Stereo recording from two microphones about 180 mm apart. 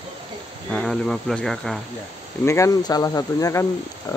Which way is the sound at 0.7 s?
Centre (ahead or behind).